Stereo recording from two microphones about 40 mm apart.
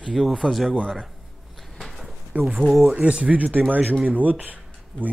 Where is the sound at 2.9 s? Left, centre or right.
Right.